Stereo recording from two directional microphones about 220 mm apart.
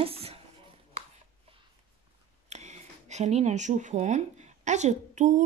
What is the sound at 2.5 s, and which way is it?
Speech, 30° right (ahead or behind).